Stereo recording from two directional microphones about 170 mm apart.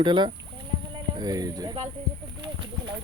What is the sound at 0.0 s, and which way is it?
Speech, 25° right (ahead or behind).